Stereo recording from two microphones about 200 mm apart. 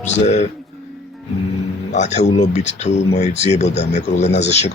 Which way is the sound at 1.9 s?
35° left (ahead or behind).